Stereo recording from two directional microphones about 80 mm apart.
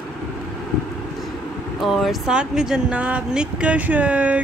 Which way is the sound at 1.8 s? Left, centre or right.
Centre.